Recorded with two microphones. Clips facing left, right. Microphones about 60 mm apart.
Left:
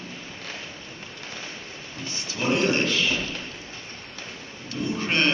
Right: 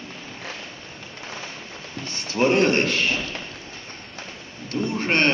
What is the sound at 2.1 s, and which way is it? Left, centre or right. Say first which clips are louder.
A man's voice: right 6 dB; right.